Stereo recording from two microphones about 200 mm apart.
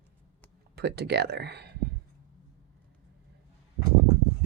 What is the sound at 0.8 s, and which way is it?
Speech, 55° right (ahead or behind).